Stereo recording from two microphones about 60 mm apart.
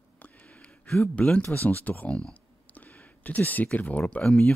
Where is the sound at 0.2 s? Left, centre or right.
Left.